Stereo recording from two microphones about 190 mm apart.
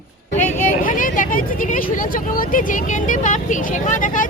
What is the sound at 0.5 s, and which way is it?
Vehicle, 45° left (ahead or behind).